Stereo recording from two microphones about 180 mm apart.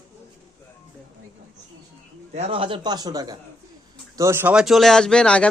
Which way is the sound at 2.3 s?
35° right (ahead or behind).